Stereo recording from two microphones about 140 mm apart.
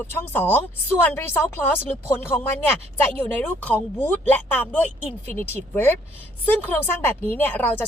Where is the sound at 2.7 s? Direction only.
10° left (ahead or behind).